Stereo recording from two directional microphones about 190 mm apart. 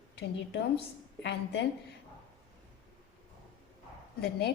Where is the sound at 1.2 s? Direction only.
65° left (ahead or behind).